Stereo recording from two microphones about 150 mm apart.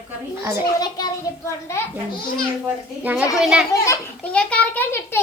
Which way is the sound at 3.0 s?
10° right (ahead or behind).